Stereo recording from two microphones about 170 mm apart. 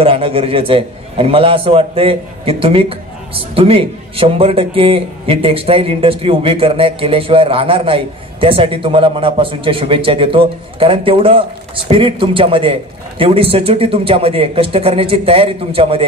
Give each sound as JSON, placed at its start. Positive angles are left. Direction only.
{"t": 0.0, "sound": "a man's voice", "side_deg": -35}